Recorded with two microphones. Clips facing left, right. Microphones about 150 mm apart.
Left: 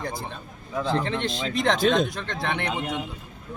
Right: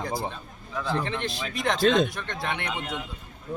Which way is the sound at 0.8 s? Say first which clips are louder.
Left 3 dB; 20° left (ahead or behind).